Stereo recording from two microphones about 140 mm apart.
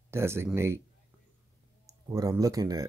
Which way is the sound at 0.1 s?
20° right (ahead or behind).